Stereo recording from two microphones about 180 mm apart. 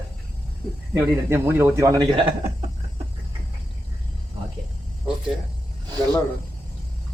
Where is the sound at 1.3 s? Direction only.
10° right (ahead or behind).